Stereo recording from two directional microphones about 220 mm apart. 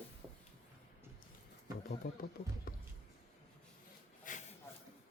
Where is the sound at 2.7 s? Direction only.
40° left (ahead or behind).